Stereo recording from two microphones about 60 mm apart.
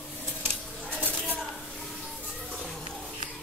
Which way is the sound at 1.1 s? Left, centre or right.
Centre.